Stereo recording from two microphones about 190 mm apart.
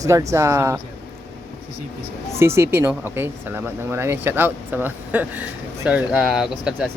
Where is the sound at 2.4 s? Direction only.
15° right (ahead or behind).